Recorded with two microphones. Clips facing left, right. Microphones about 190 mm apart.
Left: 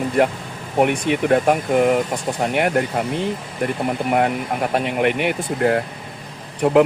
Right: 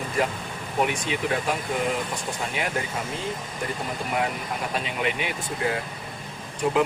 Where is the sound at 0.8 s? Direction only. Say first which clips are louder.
Left 8 dB; 60° left (ahead or behind).